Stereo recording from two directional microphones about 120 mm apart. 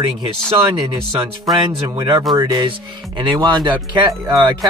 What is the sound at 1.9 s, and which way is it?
Speech, 35° right (ahead or behind).